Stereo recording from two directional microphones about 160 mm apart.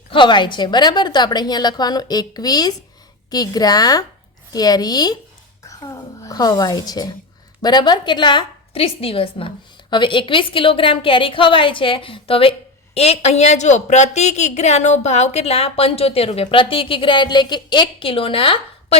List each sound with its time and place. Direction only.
0.1 s a woman's voice: 30° left (ahead or behind)